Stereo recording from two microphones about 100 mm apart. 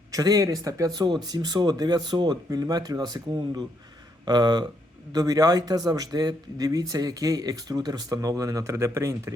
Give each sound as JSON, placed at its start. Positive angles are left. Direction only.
{"t": 0.1, "sound": "speech", "side_deg": -40}